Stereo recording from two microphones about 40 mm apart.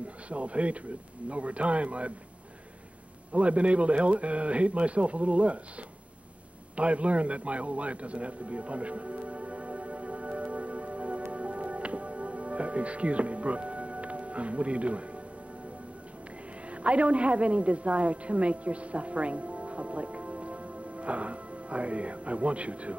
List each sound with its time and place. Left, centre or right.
0.3 s speech: right
3.3 s speech: right
6.8 s a sound: right
11.2 s music: right
16.7 s a woman's voice: right